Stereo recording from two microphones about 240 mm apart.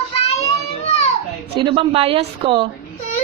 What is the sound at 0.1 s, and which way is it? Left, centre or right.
Child singing, left.